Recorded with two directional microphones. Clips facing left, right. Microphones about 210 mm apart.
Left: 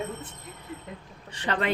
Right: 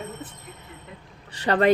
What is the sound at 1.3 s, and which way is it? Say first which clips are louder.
Speech: right 8 dB; 40° right (ahead or behind).